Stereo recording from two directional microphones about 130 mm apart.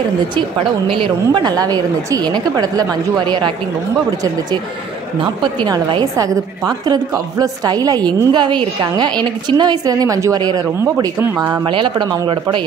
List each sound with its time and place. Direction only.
0.8 s a woman's voice: 40° right (ahead or behind)
5.2 s a woman's voice: 35° right (ahead or behind)
11.6 s a woman's voice: 40° right (ahead or behind)